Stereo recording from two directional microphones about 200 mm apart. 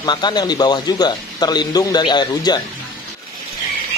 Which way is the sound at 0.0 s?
20° left (ahead or behind).